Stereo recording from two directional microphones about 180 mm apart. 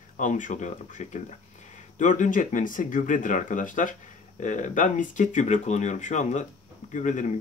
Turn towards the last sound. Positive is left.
turn(degrees=45)  # may be behind; listen again after turning